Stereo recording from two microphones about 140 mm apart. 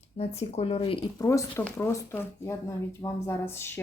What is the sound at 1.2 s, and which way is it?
A woman's voice, 20° left (ahead or behind).